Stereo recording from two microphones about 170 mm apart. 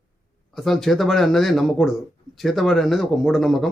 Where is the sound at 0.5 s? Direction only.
Centre (ahead or behind).